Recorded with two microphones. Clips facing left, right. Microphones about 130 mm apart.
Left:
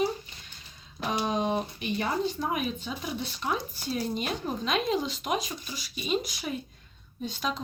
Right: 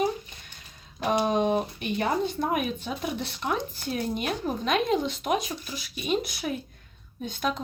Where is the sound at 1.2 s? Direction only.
55° right (ahead or behind).